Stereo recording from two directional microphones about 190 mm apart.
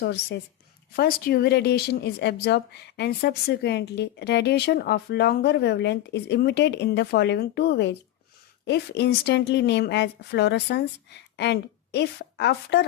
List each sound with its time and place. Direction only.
0.0 s a woman's voice: 60° left (ahead or behind)